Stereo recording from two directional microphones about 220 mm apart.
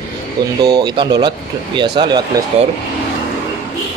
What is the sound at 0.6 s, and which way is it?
Speech, 20° right (ahead or behind).